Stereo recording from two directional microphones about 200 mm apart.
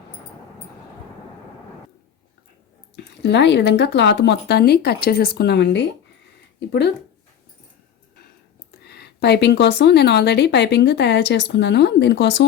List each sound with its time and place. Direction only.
2.9 s speech: 60° left (ahead or behind)
8.8 s speech: 55° left (ahead or behind)